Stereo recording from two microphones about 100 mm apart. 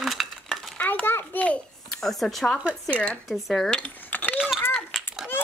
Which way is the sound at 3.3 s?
Centre (ahead or behind).